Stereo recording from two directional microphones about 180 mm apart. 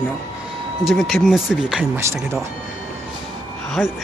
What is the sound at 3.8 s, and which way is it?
Speech, 10° left (ahead or behind).